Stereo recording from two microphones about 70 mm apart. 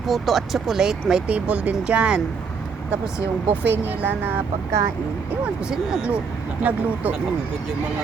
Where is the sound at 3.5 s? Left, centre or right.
Right.